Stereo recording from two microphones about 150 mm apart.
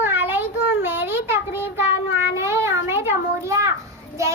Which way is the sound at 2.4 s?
15° right (ahead or behind).